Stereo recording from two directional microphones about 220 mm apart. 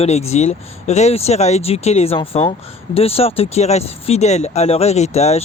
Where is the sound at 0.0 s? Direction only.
30° left (ahead or behind).